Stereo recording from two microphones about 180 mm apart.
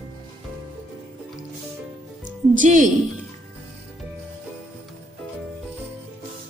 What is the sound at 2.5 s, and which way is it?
Speech, 45° right (ahead or behind).